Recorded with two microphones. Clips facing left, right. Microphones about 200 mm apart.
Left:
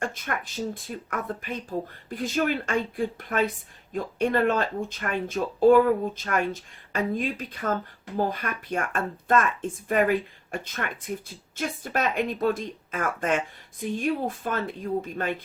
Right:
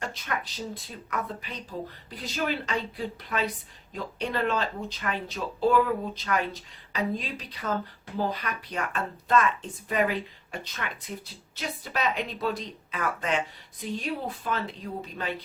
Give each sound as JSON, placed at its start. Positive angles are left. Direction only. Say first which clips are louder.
{"t": 0.0, "sound": "speech", "louder": "left 3 dB", "side_deg": 50}